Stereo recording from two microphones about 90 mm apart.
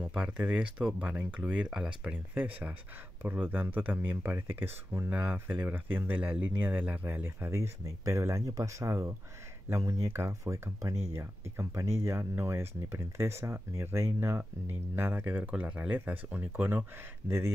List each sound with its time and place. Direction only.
0.0 s speech: 10° right (ahead or behind)
5.1 s speech: 15° right (ahead or behind)